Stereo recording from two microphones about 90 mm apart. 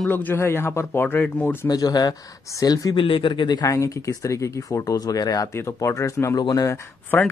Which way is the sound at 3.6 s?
35° left (ahead or behind).